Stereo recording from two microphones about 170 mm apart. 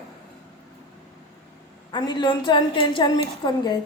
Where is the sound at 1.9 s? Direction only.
25° left (ahead or behind).